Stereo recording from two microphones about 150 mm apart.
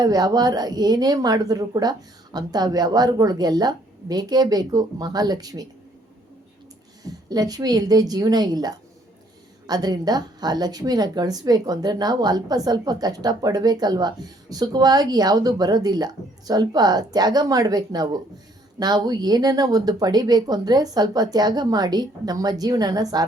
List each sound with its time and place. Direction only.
0.0 s speech: 25° right (ahead or behind)
7.0 s speech: 25° right (ahead or behind)